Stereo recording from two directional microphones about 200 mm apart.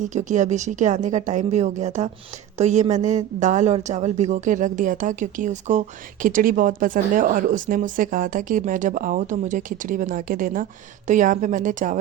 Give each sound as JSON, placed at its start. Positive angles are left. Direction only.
{"t": 0.1, "sound": "speech", "side_deg": -35}